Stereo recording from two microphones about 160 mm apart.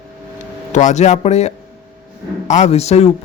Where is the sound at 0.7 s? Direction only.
50° left (ahead or behind).